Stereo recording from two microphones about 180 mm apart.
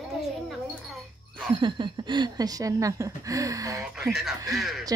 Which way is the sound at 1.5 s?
25° right (ahead or behind).